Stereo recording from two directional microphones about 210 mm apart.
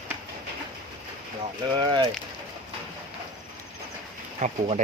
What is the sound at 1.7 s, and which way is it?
Speech, 20° right (ahead or behind).